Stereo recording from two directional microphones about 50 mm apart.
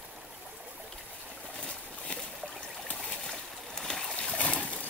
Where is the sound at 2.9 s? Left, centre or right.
Left.